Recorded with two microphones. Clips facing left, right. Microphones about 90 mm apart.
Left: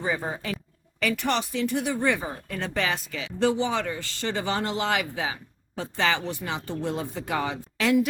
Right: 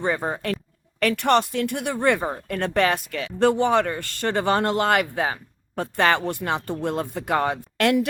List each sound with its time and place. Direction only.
0.0 s speech: 65° right (ahead or behind)